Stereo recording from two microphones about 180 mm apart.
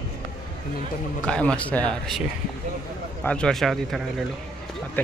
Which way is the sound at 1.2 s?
5° left (ahead or behind).